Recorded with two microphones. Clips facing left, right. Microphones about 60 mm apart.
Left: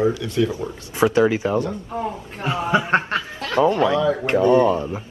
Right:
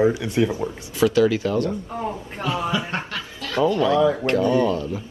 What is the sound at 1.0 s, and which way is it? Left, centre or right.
Speech, left.